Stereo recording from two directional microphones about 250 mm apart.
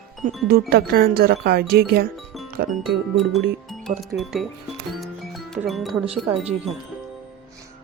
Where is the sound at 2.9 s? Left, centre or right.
Centre.